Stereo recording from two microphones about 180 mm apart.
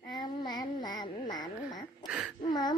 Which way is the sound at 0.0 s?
25° left (ahead or behind).